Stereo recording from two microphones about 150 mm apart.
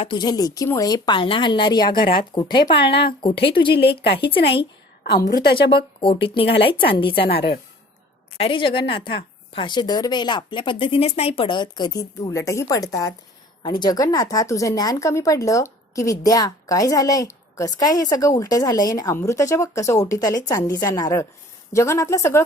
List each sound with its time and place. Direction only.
0.0 s a woman's voice: 30° left (ahead or behind)
2.7 s speech: 90° left
3.2 s a woman's voice: 35° left (ahead or behind)
5.1 s a woman's voice: 80° left
5.7 s a woman's voice: 35° left (ahead or behind)
7.3 s speech: 90° left
8.4 s a woman's voice: 35° left (ahead or behind); by 22.4 s 20° left (ahead or behind)